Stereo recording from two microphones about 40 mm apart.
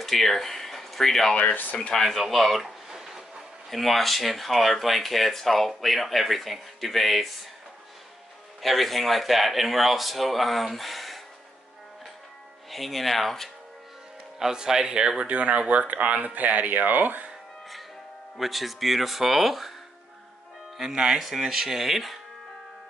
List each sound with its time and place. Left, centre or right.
0.0 s speech: centre
1.5 s speech: left
2.0 s a sound: centre
3.7 s speech: centre
8.6 s speech: centre
12.6 s speech: centre
14.4 s speech: centre
15.2 s speech: right
18.4 s speech: centre
20.9 s speech: centre
21.2 s speech: centre